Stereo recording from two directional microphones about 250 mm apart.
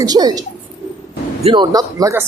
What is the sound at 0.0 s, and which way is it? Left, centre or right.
Speech, centre.